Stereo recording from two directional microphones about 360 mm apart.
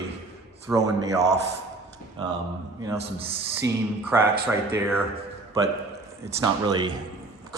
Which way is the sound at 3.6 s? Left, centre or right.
Right.